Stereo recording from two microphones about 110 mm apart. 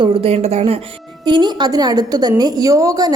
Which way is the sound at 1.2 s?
45° right (ahead or behind).